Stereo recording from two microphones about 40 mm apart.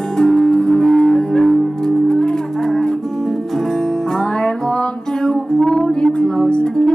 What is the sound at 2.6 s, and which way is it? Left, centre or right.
Music, centre.